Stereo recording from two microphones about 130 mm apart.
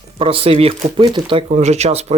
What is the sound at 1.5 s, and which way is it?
Speech, 60° right (ahead or behind).